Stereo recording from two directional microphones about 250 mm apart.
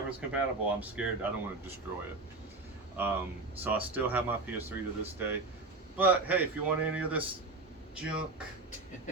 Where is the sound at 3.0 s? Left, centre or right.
Centre.